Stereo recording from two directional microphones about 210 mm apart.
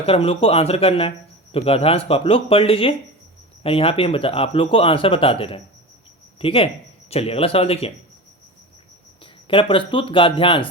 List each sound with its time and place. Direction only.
0.0 s speech: 25° left (ahead or behind)
9.2 s speech: 25° left (ahead or behind)